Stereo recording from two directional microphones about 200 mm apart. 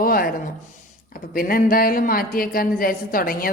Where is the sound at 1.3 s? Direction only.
45° left (ahead or behind).